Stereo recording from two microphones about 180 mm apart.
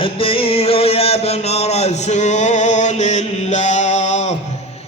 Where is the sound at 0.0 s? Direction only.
30° left (ahead or behind).